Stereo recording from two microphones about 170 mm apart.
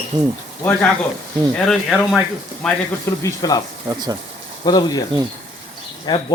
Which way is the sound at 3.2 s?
20° left (ahead or behind).